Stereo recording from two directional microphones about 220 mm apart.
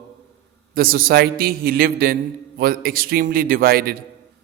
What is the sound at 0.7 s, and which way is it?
A man's voice, 40° right (ahead or behind).